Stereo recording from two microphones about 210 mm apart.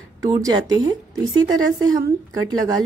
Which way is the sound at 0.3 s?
20° right (ahead or behind).